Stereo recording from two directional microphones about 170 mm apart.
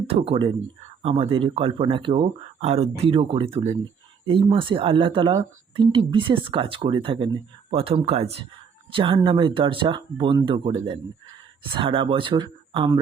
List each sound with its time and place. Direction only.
0.1 s speech: 30° right (ahead or behind)